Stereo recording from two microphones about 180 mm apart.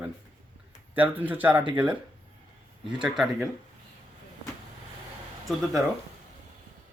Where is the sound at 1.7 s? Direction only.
25° right (ahead or behind).